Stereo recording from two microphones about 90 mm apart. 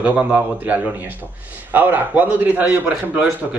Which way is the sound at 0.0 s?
20° right (ahead or behind).